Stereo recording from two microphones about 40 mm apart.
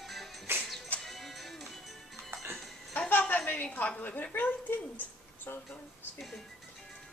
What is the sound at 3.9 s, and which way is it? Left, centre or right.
Speech, left.